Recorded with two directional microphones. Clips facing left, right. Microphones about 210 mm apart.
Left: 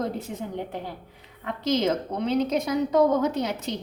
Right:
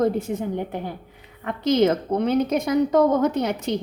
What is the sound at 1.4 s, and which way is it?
A woman's voice, 55° right (ahead or behind).